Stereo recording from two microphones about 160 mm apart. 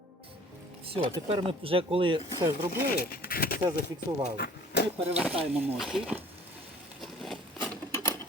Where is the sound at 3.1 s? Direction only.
70° left (ahead or behind).